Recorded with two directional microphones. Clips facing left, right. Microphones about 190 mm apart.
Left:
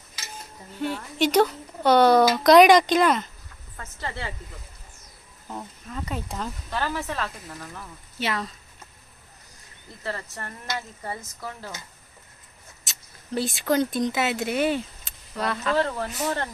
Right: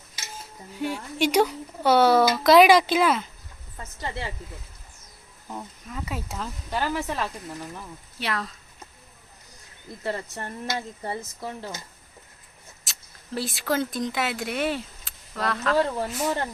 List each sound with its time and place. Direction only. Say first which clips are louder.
0.3 s speech: even; 10° right (ahead or behind)
3.8 s speech: right 1 dB; 15° right (ahead or behind)
5.5 s speech: even; 5° right (ahead or behind)
6.7 s speech: right 3 dB; 15° right (ahead or behind)
8.2 s speech: left 2 dB; centre (ahead or behind)
10.0 s speech: right 3 dB; 20° right (ahead or behind)
12.8 s speech: left 1 dB; centre (ahead or behind)
15.8 s speech: right 1 dB; 10° right (ahead or behind)